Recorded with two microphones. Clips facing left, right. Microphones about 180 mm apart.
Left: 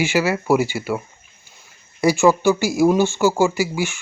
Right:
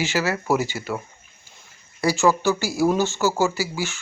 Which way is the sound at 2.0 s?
15° left (ahead or behind).